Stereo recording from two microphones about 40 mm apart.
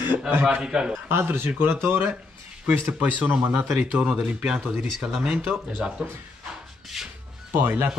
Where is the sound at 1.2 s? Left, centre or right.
Right.